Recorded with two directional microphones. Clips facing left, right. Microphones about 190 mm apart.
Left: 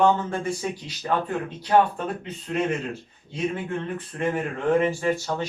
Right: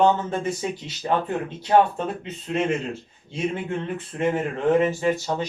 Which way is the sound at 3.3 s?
25° right (ahead or behind).